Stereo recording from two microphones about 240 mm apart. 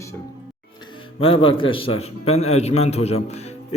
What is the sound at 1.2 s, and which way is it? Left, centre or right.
A man's voice, left.